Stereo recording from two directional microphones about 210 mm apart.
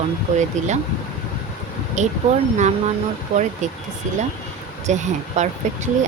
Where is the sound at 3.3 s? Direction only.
30° right (ahead or behind).